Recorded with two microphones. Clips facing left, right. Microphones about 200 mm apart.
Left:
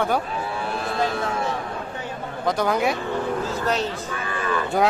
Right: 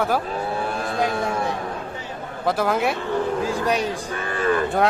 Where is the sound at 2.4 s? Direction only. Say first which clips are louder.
Even; 5° right (ahead or behind).